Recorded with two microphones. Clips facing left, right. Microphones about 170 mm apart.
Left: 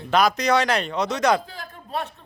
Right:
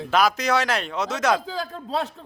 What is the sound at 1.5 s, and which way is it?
Speech, 90° right.